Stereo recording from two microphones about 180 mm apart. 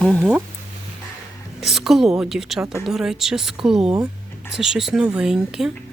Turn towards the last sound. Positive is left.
turn(degrees=-5)  # may be behind; listen again after turning